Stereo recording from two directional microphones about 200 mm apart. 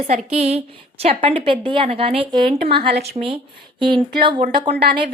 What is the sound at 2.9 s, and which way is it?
Speech, 55° right (ahead or behind).